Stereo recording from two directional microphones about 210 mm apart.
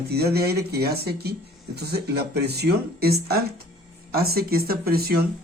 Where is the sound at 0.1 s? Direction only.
50° right (ahead or behind).